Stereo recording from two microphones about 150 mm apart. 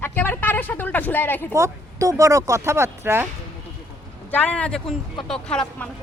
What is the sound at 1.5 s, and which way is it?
Speech, 20° right (ahead or behind).